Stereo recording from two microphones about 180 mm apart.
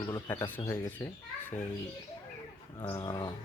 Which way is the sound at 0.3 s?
10° left (ahead or behind).